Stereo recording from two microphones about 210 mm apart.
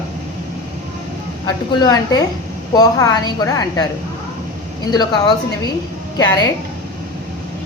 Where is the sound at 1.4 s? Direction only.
20° left (ahead or behind).